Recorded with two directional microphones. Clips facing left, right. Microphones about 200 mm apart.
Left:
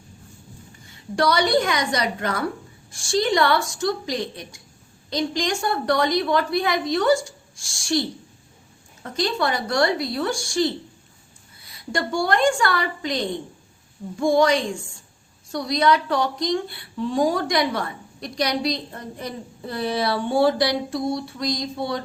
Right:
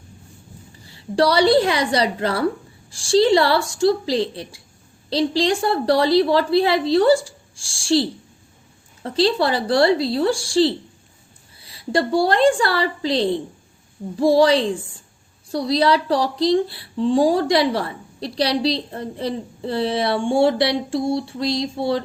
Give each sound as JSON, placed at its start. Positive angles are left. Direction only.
{"t": 0.8, "sound": "a woman's voice", "side_deg": -30}
{"t": 9.0, "sound": "a woman's voice", "side_deg": -30}